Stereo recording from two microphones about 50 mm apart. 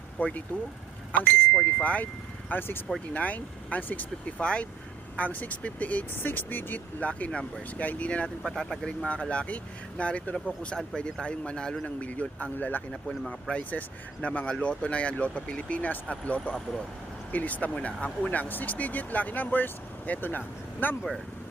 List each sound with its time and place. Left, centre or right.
0.2 s speech: left
2.5 s speech: left
3.1 s speech: left
4.4 s speech: left
5.1 s speech: left
6.1 s speech: left
7.0 s speech: left
8.4 s speech: centre
9.3 s speech: left
11.9 s speech: left
12.9 s speech: centre
13.6 s speech: left
14.2 s speech: left